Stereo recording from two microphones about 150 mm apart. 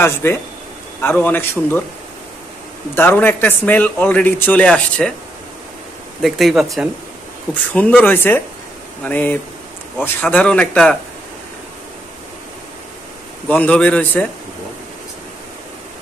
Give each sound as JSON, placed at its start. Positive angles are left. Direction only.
{"t": 0.0, "sound": "a man's voice", "side_deg": 15}
{"t": 3.0, "sound": "a man's voice", "side_deg": 15}
{"t": 6.2, "sound": "speech", "side_deg": 0}
{"t": 8.0, "sound": "a man's voice", "side_deg": 15}
{"t": 13.5, "sound": "a man's voice", "side_deg": 10}